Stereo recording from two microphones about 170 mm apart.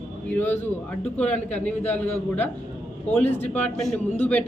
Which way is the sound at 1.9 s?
10° left (ahead or behind).